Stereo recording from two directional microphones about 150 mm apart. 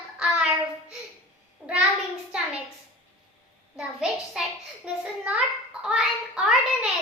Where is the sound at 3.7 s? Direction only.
5° right (ahead or behind).